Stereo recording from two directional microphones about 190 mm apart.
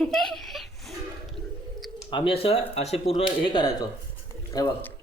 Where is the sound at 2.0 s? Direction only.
25° left (ahead or behind).